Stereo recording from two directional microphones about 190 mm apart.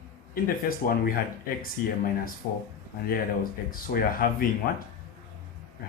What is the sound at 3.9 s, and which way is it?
Speech, 50° left (ahead or behind).